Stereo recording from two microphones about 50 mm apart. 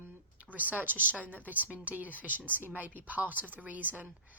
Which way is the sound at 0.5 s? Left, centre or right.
Right.